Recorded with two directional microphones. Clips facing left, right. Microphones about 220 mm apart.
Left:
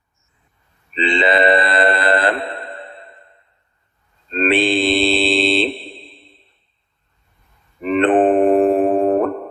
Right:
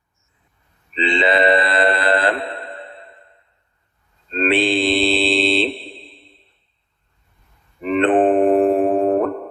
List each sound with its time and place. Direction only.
0.9 s mantra: 50° left (ahead or behind)
4.4 s mantra: 50° left (ahead or behind)
7.9 s mantra: 50° left (ahead or behind)